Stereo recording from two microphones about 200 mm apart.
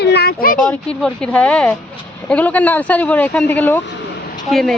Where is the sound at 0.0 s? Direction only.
55° left (ahead or behind).